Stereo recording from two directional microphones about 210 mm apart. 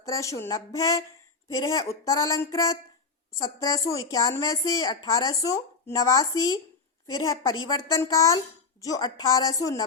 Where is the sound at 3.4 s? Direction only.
15° left (ahead or behind).